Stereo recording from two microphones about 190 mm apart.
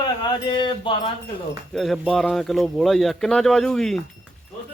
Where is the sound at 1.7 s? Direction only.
Centre (ahead or behind).